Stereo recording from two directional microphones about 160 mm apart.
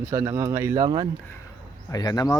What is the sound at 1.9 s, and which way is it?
Speech, 25° left (ahead or behind).